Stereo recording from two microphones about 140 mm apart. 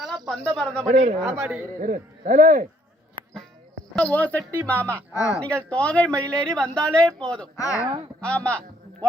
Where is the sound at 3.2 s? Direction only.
90° right.